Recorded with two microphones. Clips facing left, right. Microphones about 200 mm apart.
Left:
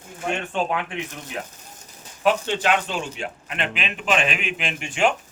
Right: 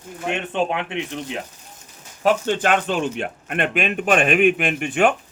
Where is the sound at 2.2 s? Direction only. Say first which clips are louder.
Right 2 dB; 50° right (ahead or behind).